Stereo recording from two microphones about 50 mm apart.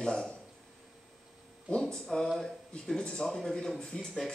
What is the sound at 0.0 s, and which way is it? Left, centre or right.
Speech, centre.